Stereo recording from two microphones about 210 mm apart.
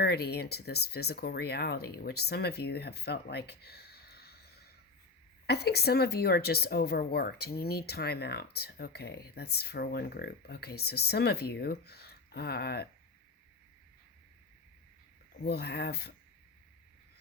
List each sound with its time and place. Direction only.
0.0 s speech: 50° left (ahead or behind)
15.4 s speech: 50° left (ahead or behind)